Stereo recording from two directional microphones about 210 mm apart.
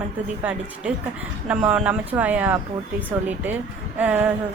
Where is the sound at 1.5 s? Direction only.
5° right (ahead or behind).